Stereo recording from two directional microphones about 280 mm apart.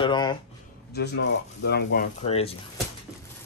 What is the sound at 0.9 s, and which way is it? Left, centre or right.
Speech, left.